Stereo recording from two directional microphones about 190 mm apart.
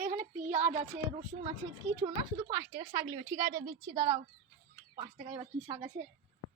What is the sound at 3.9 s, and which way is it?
Speech, 25° right (ahead or behind).